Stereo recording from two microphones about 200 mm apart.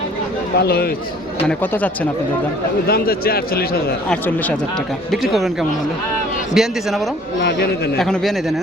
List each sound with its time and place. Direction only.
0.6 s speech: 50° left (ahead or behind)
1.5 s speech: 10° left (ahead or behind)
2.8 s speech: 50° left (ahead or behind)
4.1 s a man's voice: 10° left (ahead or behind)